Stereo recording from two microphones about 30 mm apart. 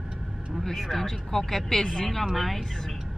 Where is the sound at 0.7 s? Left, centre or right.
Centre.